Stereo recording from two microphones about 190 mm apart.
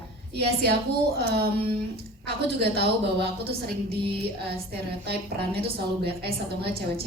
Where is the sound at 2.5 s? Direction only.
60° right (ahead or behind).